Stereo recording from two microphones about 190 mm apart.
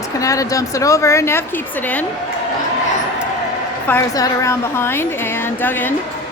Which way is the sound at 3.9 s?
15° left (ahead or behind).